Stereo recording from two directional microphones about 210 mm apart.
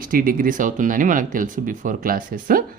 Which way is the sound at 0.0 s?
45° right (ahead or behind).